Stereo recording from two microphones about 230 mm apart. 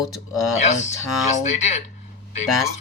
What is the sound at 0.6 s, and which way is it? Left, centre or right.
Speech, left.